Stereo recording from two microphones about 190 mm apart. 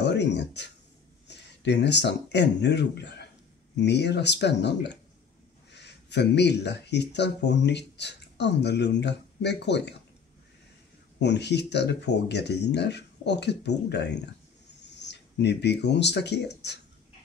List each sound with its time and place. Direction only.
0.0 s speech: 65° left (ahead or behind)
11.1 s speech: 65° left (ahead or behind)